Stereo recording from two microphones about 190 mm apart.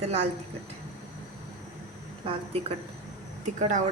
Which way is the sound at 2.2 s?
30° right (ahead or behind).